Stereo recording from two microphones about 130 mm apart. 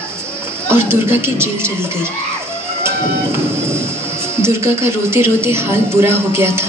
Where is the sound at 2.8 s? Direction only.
20° right (ahead or behind).